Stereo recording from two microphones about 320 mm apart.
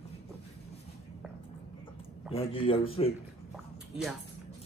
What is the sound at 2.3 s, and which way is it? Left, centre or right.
Speech, centre.